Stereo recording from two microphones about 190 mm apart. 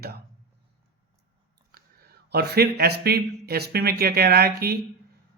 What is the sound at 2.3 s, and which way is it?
A man's voice, 55° right (ahead or behind).